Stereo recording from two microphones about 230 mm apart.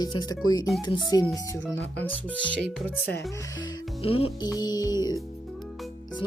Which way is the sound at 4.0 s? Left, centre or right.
Left.